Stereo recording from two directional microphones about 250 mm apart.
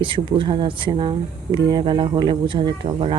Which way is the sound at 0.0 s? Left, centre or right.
Centre.